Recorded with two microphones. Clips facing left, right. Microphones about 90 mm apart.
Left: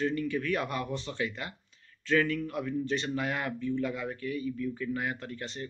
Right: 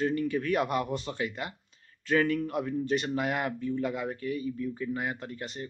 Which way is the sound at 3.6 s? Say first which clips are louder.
Right 1 dB; 35° right (ahead or behind).